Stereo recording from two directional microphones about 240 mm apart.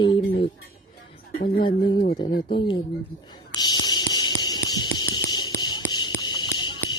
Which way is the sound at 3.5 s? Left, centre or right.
Centre.